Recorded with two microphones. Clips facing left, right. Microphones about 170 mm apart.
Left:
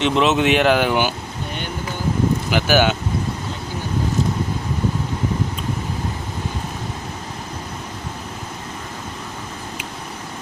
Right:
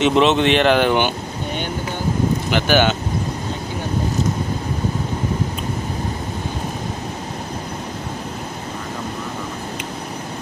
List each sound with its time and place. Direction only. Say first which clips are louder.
0.0 s speech: right 2 dB; centre (ahead or behind)
2.5 s speech: right 1 dB; 5° left (ahead or behind)